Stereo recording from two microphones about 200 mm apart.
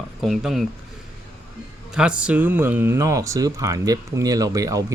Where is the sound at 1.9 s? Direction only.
5° right (ahead or behind).